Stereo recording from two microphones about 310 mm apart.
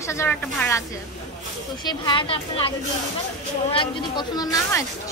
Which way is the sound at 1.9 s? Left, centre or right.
Centre.